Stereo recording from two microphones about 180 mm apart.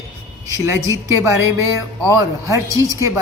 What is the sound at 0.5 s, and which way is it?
Speech, 20° right (ahead or behind).